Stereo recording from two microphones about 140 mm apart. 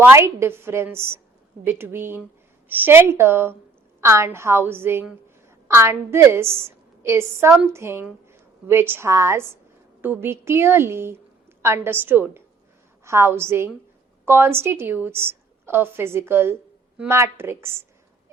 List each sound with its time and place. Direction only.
0.1 s a woman's voice: 20° right (ahead or behind)